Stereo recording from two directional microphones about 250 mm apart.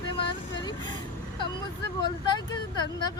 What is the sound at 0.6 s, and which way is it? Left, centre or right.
Vehicle, centre.